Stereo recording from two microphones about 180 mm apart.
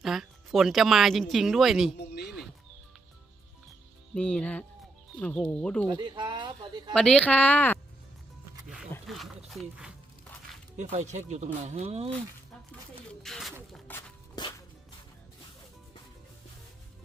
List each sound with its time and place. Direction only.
0.0 s speech: centre (ahead or behind)
2.0 s a sound: 65° left (ahead or behind)
4.1 s a woman's voice: 5° left (ahead or behind)
5.9 s speech: 25° right (ahead or behind)
6.9 s a woman's voice: 5° left (ahead or behind)
9.0 s speech: centre (ahead or behind)
10.9 s speech: 40° right (ahead or behind)
13.2 s a sound: centre (ahead or behind)
14.4 s music: 25° left (ahead or behind)